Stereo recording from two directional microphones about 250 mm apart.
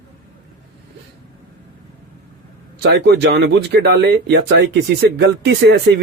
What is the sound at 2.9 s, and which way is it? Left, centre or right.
Speech, right.